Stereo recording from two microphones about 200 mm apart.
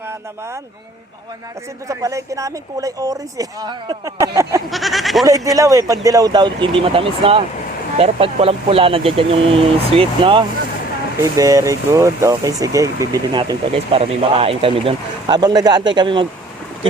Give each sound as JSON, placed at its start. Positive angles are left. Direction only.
{"t": 1.9, "sound": "speech", "side_deg": -15}
{"t": 4.7, "sound": "speech", "side_deg": 0}
{"t": 5.5, "sound": "speech", "side_deg": -15}
{"t": 11.2, "sound": "speech", "side_deg": -15}